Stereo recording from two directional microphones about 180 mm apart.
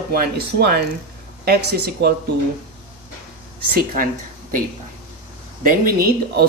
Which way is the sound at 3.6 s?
55° right (ahead or behind).